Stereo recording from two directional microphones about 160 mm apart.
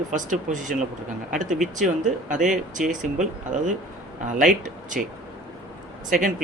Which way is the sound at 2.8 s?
5° right (ahead or behind).